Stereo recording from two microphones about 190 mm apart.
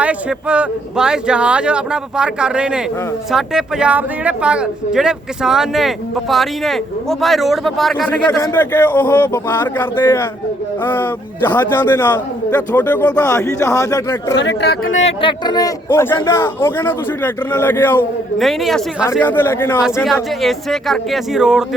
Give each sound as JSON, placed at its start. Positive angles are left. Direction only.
{"t": 0.0, "sound": "speech", "side_deg": -5}
{"t": 8.3, "sound": "a man's voice", "side_deg": 15}
{"t": 14.3, "sound": "speech", "side_deg": 65}
{"t": 15.0, "sound": "a man's voice", "side_deg": 25}
{"t": 19.2, "sound": "a man's voice", "side_deg": 10}
{"t": 19.8, "sound": "speech", "side_deg": 0}